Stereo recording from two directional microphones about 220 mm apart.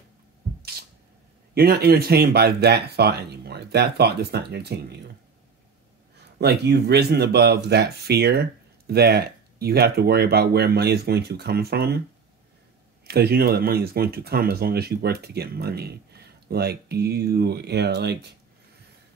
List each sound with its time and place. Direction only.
0.6 s a sound: 45° right (ahead or behind)
1.5 s speech: 45° right (ahead or behind)
6.1 s speech: 50° right (ahead or behind)
13.0 s speech: 45° right (ahead or behind)